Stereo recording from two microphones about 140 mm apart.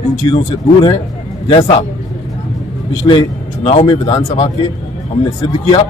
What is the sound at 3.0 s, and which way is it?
Speech, 35° left (ahead or behind).